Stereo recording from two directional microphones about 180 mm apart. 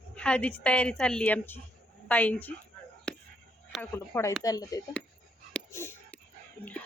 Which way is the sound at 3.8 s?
15° left (ahead or behind).